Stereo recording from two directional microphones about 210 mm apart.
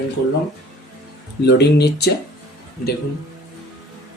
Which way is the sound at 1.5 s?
50° left (ahead or behind).